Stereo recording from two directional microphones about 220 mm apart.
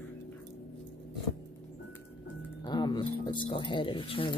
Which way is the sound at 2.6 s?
20° left (ahead or behind).